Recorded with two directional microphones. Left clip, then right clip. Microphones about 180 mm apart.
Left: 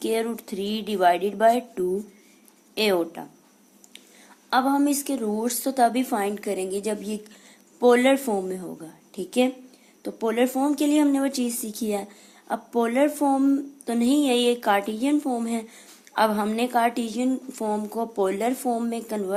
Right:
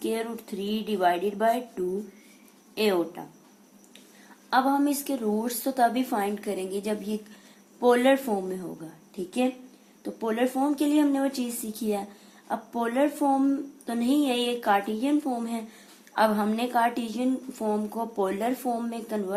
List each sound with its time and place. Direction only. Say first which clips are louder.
0.0 s a woman's voice: left 4 dB; 45° left (ahead or behind)
4.4 s a woman's voice: left 2 dB; 35° left (ahead or behind)